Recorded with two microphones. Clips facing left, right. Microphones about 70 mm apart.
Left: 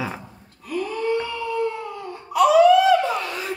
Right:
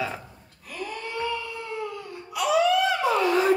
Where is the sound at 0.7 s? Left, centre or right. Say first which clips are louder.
Left 10 dB; left.